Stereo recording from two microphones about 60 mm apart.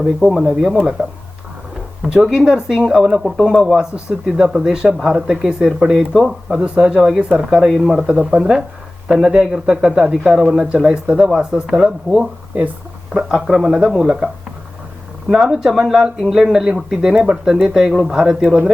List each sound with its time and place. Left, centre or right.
0.0 s speech: centre
2.0 s a man's voice: centre
8.0 s a man's voice: centre
15.3 s a man's voice: centre